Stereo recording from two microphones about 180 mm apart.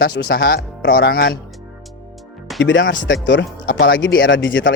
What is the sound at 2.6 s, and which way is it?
Speech, 90° left.